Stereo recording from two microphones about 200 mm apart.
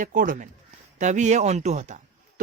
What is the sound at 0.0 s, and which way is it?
A man's voice, 40° right (ahead or behind).